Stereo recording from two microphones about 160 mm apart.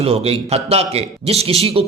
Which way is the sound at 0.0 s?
40° right (ahead or behind).